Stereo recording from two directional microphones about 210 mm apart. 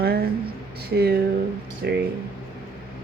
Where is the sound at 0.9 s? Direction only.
50° right (ahead or behind).